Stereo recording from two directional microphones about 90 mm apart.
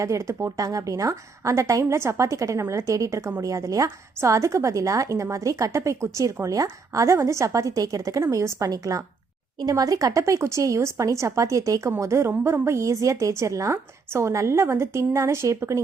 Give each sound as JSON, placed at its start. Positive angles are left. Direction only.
{"t": 0.0, "sound": "speech", "side_deg": -35}